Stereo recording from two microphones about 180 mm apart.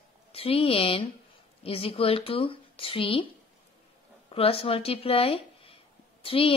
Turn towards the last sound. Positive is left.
turn(degrees=30)  # may be behind; listen again after turning